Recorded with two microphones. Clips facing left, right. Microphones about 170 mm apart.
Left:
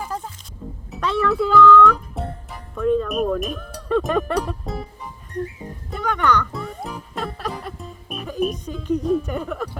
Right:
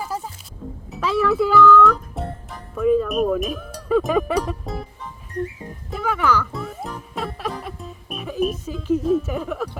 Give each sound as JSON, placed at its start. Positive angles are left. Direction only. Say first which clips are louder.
{"t": 0.0, "sound": "music", "louder": "right 1 dB", "side_deg": -5}